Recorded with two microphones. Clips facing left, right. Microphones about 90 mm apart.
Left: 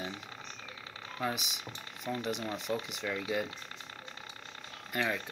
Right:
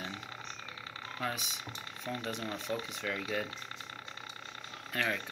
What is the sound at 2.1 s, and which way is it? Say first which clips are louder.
Speech: left 3 dB; 15° left (ahead or behind).